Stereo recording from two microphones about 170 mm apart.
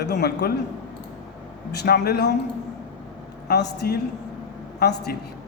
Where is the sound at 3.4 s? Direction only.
80° left.